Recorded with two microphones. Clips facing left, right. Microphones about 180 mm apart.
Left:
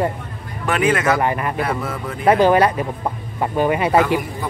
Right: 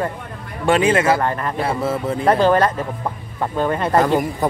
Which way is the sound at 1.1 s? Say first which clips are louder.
Left 1 dB; 10° left (ahead or behind).